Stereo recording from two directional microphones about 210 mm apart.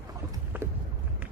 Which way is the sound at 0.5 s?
10° right (ahead or behind).